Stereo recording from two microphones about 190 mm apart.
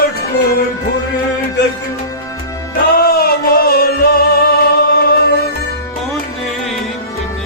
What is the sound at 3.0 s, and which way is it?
Music, 55° left (ahead or behind).